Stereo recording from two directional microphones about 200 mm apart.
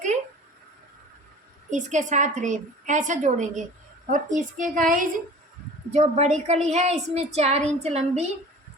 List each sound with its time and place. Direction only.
1.7 s a woman's voice: 35° right (ahead or behind)